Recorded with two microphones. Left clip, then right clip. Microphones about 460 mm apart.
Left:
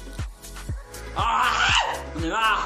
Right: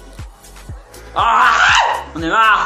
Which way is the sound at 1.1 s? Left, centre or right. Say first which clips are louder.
Right 10 dB; right.